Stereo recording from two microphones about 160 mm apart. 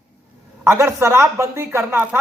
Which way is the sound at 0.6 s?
15° right (ahead or behind).